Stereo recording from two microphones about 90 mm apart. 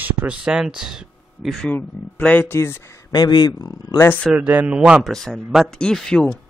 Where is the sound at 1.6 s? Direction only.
15° left (ahead or behind).